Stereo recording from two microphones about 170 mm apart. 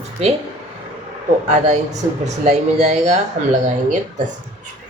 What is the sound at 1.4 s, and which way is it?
Speech, 45° right (ahead or behind).